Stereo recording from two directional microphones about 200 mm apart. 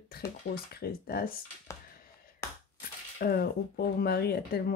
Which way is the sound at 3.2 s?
50° left (ahead or behind).